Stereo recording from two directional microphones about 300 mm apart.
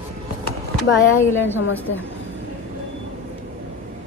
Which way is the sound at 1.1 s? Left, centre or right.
Centre.